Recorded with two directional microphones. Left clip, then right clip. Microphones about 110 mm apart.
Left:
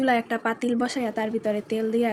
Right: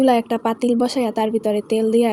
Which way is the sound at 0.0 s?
40° right (ahead or behind).